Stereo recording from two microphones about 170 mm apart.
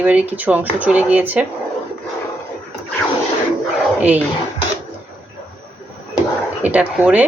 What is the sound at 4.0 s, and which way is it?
Speech, 10° right (ahead or behind).